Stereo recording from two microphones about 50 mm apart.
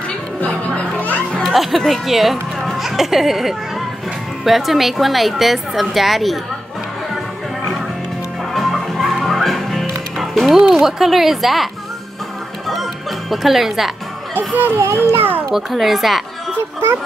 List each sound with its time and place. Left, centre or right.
1.5 s a woman's voice: centre
8.5 s music: centre
10.4 s a woman's voice: centre
13.3 s a woman's voice: centre
14.3 s a child's voice: right
14.8 s a child's voice: right
15.1 s a child's voice: right
15.5 s a woman's voice: centre
16.5 s a sound: right